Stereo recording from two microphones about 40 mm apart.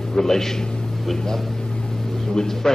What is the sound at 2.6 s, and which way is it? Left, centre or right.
Speech, centre.